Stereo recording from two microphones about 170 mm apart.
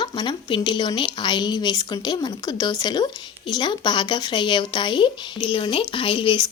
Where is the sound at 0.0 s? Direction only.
25° left (ahead or behind).